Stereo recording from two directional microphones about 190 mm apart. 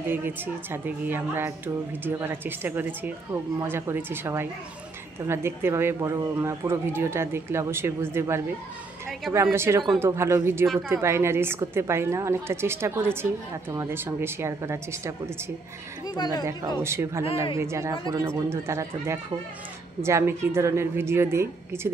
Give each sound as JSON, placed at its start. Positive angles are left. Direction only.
{"t": 0.1, "sound": "a woman's voice", "side_deg": -10}
{"t": 16.2, "sound": "speech", "side_deg": 20}
{"t": 16.8, "sound": "a woman's voice", "side_deg": -15}